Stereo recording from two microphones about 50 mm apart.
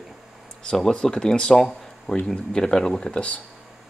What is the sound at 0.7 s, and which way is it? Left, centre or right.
Speech, centre.